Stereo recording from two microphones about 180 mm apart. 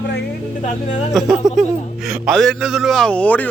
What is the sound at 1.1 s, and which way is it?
Speech, centre (ahead or behind).